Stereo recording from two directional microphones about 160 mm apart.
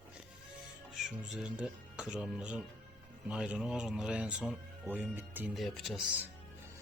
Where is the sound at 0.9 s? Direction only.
5° right (ahead or behind).